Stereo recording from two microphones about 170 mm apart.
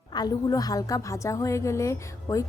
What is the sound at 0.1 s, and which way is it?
A woman's voice, 25° left (ahead or behind).